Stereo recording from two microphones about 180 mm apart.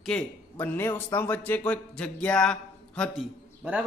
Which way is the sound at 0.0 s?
5° left (ahead or behind).